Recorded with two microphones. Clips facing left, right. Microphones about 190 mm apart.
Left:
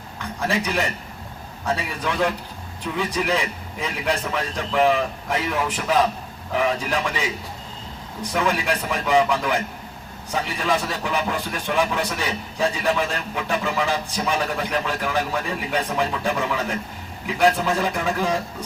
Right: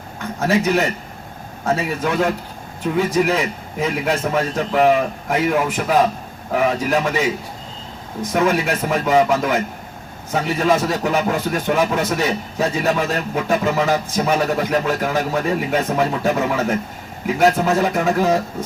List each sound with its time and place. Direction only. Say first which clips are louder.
0.2 s a man's voice: right 6 dB; 45° right (ahead or behind)